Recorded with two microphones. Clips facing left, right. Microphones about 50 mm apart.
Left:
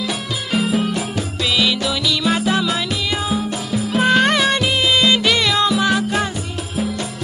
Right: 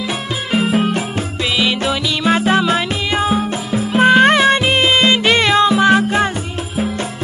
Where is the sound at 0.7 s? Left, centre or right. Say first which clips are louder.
Right 3 dB; right.